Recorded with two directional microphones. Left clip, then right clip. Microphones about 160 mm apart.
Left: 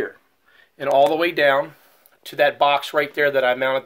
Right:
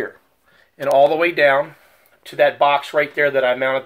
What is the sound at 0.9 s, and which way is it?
Speech, 25° left (ahead or behind).